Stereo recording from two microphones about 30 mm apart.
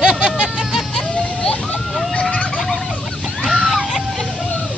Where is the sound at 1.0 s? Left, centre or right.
Left.